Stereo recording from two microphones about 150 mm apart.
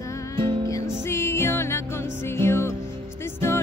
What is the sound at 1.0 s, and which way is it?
Music, 15° left (ahead or behind).